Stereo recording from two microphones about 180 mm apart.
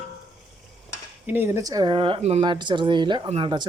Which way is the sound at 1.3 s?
10° right (ahead or behind).